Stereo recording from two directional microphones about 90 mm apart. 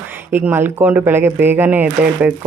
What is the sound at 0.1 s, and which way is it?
Speech, 25° right (ahead or behind).